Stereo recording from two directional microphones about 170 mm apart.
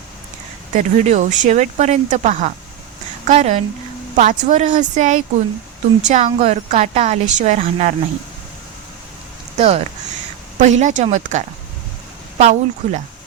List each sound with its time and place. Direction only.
0.7 s a woman's voice: 45° right (ahead or behind)
9.6 s a woman's voice: 40° right (ahead or behind)